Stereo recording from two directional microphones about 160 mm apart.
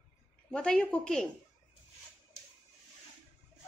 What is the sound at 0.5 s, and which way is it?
Speech, 5° left (ahead or behind).